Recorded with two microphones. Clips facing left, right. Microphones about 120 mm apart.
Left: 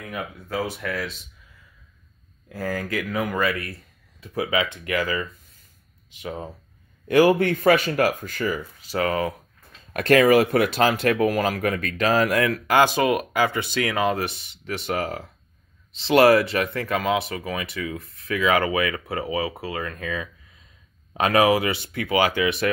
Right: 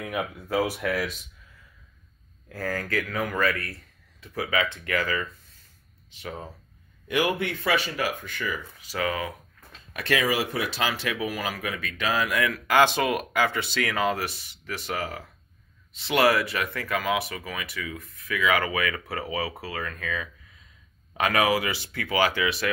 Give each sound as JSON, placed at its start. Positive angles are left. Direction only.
{"t": 0.0, "sound": "speech", "side_deg": -10}
{"t": 2.5, "sound": "speech", "side_deg": 15}
{"t": 7.1, "sound": "speech", "side_deg": 40}
{"t": 9.9, "sound": "speech", "side_deg": 50}
{"t": 12.6, "sound": "speech", "side_deg": 15}